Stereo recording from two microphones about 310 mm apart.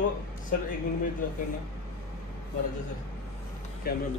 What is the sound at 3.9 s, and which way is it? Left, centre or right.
Speech, left.